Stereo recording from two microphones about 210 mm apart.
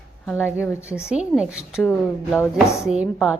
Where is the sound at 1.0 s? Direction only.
5° right (ahead or behind); by 2.8 s 10° left (ahead or behind).